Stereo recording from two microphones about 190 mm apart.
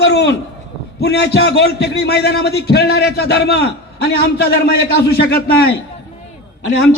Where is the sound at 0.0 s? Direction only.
65° left (ahead or behind).